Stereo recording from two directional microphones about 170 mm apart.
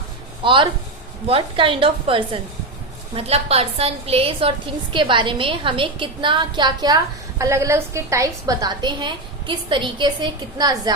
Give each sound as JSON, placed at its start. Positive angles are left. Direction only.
{"t": 0.4, "sound": "a woman's voice", "side_deg": -30}